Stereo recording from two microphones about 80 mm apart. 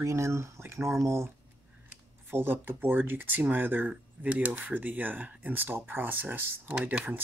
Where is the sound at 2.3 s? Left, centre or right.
Right.